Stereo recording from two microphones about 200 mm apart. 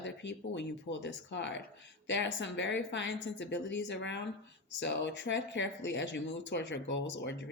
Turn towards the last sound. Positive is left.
turn(degrees=60)  # may be behind; listen again after turning